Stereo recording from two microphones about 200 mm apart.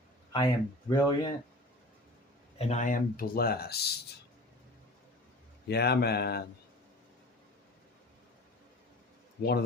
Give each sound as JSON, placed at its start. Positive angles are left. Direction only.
{"t": 0.3, "sound": "speech", "side_deg": 20}
{"t": 2.6, "sound": "speech", "side_deg": 35}
{"t": 5.6, "sound": "speech", "side_deg": 55}
{"t": 9.4, "sound": "speech", "side_deg": 50}